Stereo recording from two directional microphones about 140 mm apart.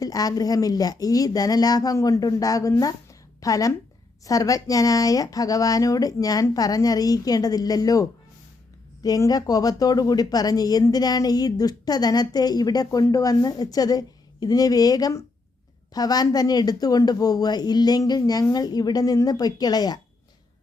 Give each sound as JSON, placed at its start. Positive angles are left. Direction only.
{"t": 0.0, "sound": "speech", "side_deg": 25}
{"t": 9.0, "sound": "speech", "side_deg": 25}